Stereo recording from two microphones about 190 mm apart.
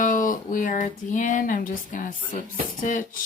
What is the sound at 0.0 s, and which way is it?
Speech, 45° left (ahead or behind).